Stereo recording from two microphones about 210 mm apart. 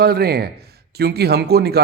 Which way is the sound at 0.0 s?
45° right (ahead or behind).